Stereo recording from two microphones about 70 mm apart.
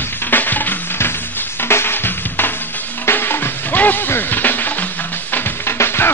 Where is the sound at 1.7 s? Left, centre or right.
Left.